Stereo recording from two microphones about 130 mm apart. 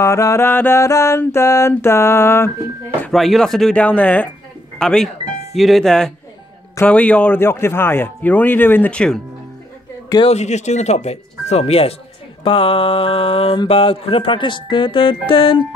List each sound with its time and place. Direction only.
0.0 s mantra: 25° left (ahead or behind)
3.1 s speech: centre (ahead or behind)
10.2 s speech: 60° left (ahead or behind)
12.4 s mantra: 40° left (ahead or behind)